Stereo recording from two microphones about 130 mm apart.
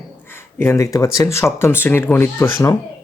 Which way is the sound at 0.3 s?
20° left (ahead or behind).